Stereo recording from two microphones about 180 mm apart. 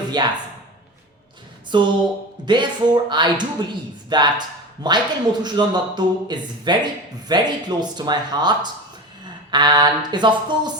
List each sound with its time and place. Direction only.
0.1 s speech: 25° right (ahead or behind)
1.7 s speech: 25° right (ahead or behind)